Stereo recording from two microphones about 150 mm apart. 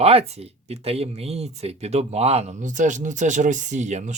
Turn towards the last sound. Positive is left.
turn(degrees=-50)  # may be behind; listen again after turning